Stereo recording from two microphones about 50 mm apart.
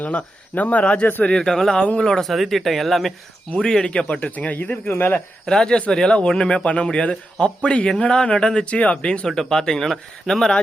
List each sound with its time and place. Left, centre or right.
0.0 s speech: left
1.2 s speech: centre
2.3 s speech: centre
3.6 s speech: centre
4.3 s speech: left
5.5 s speech: centre